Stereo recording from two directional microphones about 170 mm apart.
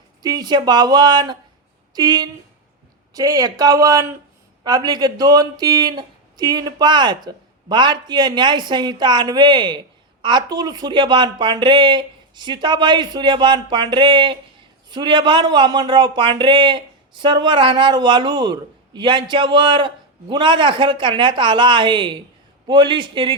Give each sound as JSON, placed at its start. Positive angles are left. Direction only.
{"t": 0.2, "sound": "a man's voice", "side_deg": -25}